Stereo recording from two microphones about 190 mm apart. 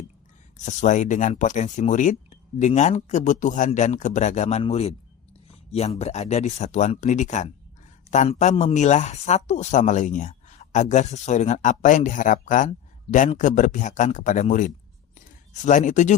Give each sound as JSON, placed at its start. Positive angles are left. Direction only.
{"t": 0.6, "sound": "speech", "side_deg": 40}
{"t": 5.5, "sound": "a sound", "side_deg": 35}
{"t": 6.0, "sound": "speech", "side_deg": 35}